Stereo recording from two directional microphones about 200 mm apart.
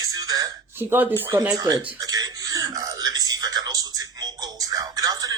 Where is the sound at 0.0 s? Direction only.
20° right (ahead or behind).